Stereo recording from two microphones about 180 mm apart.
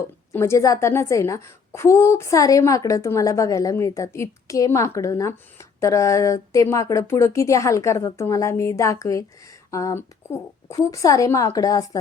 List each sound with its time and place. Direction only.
0.3 s a woman's voice: 15° left (ahead or behind)